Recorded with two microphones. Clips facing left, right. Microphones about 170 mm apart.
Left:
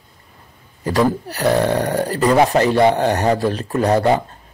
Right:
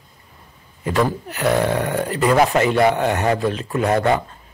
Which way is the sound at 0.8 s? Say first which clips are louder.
Left 3 dB; 35° left (ahead or behind).